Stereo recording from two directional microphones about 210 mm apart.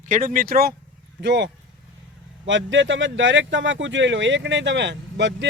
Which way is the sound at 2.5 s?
60° right (ahead or behind).